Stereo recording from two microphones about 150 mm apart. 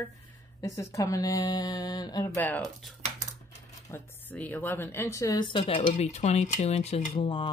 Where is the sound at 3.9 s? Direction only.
10° left (ahead or behind); by 7.2 s 45° left (ahead or behind).